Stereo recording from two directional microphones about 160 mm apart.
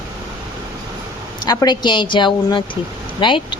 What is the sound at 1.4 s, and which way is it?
Speech, 25° left (ahead or behind).